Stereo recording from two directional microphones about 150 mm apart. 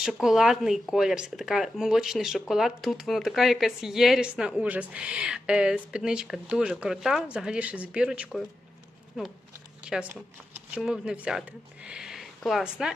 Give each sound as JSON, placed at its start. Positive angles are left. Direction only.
{"t": 0.0, "sound": "speech", "side_deg": -5}